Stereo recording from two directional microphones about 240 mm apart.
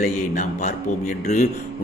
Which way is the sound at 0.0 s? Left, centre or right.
Left.